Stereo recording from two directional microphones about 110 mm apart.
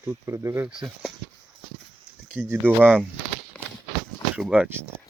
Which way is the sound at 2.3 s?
20° right (ahead or behind).